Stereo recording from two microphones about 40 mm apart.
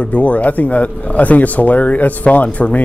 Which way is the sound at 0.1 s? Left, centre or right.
Left.